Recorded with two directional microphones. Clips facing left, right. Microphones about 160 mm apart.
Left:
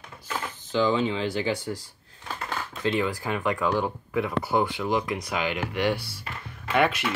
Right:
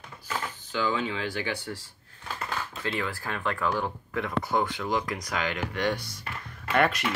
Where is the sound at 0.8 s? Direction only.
25° left (ahead or behind).